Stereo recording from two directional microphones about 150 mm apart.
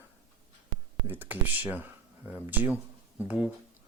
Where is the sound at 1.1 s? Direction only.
10° right (ahead or behind).